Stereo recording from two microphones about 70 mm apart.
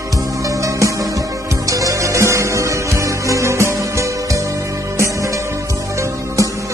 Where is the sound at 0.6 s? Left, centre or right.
Right.